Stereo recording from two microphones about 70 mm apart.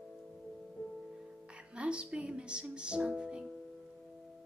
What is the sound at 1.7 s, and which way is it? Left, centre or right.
Music, centre.